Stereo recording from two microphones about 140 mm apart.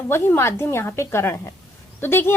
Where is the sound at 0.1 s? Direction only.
20° left (ahead or behind).